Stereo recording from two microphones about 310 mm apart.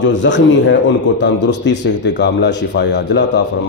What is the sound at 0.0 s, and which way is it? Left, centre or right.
A man's voice, left.